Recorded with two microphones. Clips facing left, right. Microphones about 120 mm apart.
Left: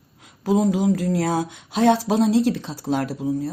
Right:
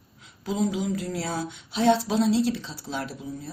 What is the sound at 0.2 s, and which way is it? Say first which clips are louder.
Speech: left 7 dB; 55° left (ahead or behind).